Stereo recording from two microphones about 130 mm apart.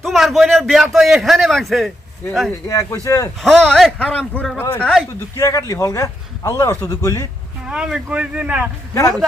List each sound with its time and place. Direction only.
0.0 s a man's voice: centre (ahead or behind)
2.6 s speech: 25° left (ahead or behind)
3.4 s a man's voice: 5° left (ahead or behind)
5.4 s speech: 25° left (ahead or behind)
7.7 s speech: 5° right (ahead or behind)